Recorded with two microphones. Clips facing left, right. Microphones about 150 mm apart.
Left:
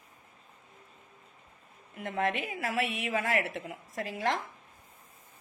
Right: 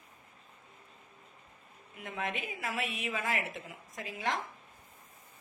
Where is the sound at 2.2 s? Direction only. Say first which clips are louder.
Left 6 dB; 65° left (ahead or behind).